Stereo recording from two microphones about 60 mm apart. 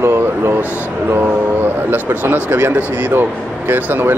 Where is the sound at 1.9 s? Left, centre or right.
Right.